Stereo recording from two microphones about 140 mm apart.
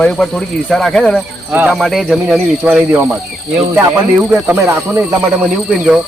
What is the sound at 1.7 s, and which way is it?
Speech, centre (ahead or behind).